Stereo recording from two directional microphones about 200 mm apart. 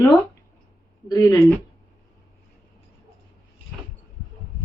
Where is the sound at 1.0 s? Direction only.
15° left (ahead or behind).